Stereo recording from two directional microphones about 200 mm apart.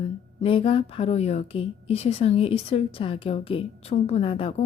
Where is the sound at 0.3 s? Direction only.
30° left (ahead or behind).